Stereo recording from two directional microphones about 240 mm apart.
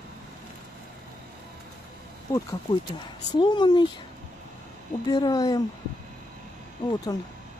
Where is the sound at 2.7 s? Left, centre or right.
Left.